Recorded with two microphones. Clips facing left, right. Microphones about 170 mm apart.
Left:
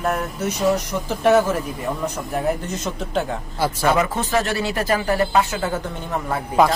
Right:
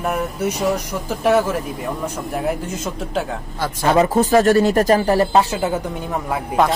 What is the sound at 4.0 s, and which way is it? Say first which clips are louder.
Speech: right 7 dB; 40° right (ahead or behind).